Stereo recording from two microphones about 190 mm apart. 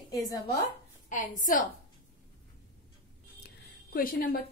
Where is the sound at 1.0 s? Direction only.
40° left (ahead or behind).